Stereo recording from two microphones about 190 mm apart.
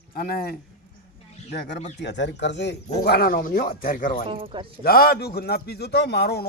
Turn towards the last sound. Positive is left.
turn(degrees=60)  # may be behind; listen again after turning